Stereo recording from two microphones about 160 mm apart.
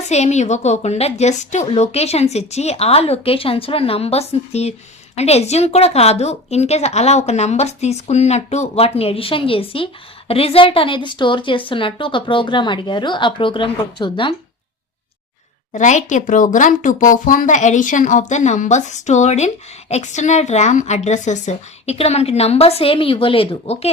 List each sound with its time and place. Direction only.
0.1 s a woman's voice: 45° left (ahead or behind)
15.7 s a woman's voice: 50° left (ahead or behind)